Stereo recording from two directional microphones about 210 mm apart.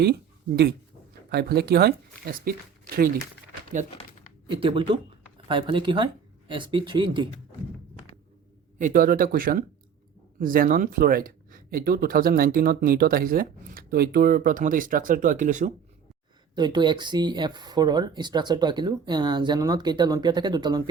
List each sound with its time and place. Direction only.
0.0 s speech: 50° right (ahead or behind)
4.4 s speech: 25° right (ahead or behind)
8.8 s speech: 40° right (ahead or behind)
16.6 s speech: 20° right (ahead or behind)